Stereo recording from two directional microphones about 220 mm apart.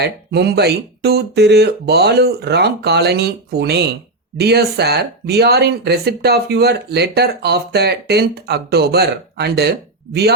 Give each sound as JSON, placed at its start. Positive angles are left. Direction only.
{"t": 0.0, "sound": "speech", "side_deg": -50}